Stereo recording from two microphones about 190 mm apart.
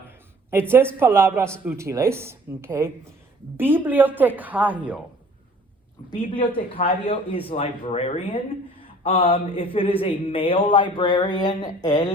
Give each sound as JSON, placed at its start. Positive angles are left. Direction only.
{"t": 0.5, "sound": "a woman's voice", "side_deg": -10}
{"t": 6.1, "sound": "speech", "side_deg": 25}